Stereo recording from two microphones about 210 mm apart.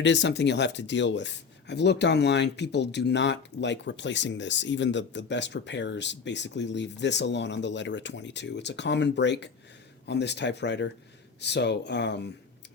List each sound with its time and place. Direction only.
0.0 s speech: 55° left (ahead or behind)